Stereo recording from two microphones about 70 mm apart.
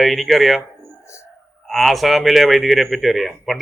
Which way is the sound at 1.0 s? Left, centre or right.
Left.